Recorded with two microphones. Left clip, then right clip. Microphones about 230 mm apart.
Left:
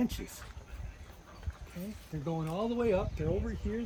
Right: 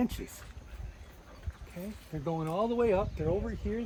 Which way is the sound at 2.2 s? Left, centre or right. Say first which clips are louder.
Right 4 dB; right.